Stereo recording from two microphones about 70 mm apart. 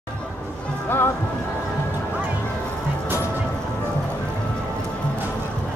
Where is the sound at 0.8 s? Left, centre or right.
Left.